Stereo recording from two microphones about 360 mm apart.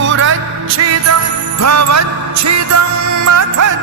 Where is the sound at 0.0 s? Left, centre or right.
Right.